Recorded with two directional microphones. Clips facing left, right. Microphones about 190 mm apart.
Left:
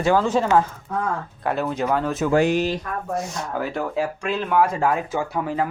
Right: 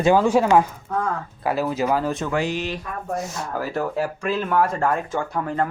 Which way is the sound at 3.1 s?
Centre (ahead or behind).